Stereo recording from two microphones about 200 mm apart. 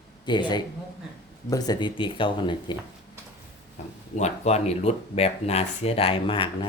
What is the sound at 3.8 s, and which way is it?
Speech, 35° left (ahead or behind).